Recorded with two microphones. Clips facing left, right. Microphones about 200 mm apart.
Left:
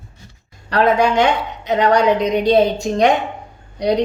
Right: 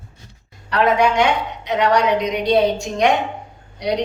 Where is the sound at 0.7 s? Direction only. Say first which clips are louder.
Left 2 dB; 35° left (ahead or behind).